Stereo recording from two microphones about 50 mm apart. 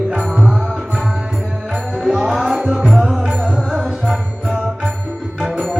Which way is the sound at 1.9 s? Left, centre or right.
Centre.